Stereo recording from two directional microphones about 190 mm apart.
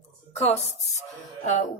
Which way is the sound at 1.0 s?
40° left (ahead or behind).